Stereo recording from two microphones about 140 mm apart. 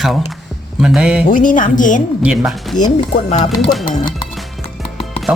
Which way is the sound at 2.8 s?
60° left (ahead or behind).